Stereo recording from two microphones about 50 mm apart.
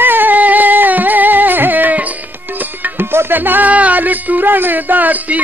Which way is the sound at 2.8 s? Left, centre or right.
Right.